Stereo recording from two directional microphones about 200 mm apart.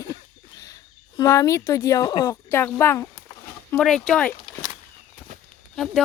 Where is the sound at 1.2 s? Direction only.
15° left (ahead or behind).